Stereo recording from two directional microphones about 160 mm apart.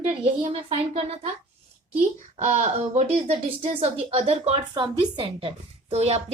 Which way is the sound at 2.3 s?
45° right (ahead or behind).